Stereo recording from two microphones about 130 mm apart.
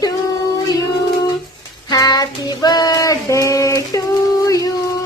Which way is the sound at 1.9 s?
30° left (ahead or behind).